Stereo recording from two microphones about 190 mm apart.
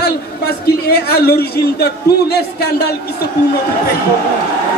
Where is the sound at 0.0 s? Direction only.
55° left (ahead or behind).